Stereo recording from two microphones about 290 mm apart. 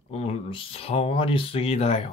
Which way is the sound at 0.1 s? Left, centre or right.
Left.